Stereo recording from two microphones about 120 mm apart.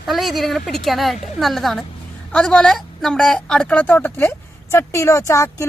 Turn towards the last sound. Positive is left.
turn(degrees=25)  # may be behind; listen again after turning